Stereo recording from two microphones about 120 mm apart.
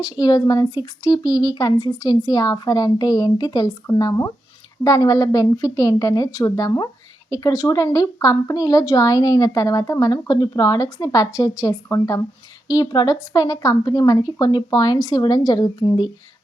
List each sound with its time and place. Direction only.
0.0 s speech: 30° left (ahead or behind)